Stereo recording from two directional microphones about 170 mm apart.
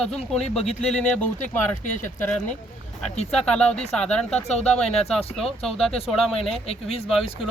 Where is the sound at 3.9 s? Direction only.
5° left (ahead or behind).